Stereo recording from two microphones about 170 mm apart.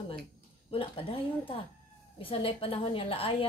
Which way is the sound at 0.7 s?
35° left (ahead or behind).